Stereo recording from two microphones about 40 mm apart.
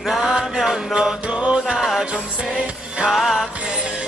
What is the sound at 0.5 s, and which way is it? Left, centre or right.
Mantra, centre.